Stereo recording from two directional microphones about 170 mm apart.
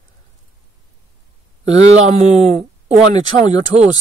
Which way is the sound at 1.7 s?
40° right (ahead or behind).